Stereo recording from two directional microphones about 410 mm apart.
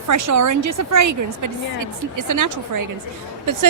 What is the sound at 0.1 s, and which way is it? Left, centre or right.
Speech, right.